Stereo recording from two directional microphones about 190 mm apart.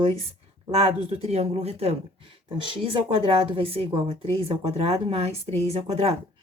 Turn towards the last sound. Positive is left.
turn(degrees=-35)  # may be behind; listen again after turning